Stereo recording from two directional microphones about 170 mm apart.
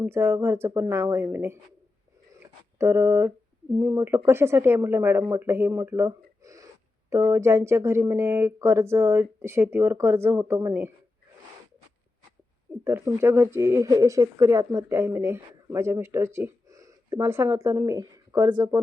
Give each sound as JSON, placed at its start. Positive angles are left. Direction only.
{"t": 0.0, "sound": "speech", "side_deg": -15}
{"t": 2.7, "sound": "speech", "side_deg": -15}
{"t": 12.8, "sound": "speech", "side_deg": -15}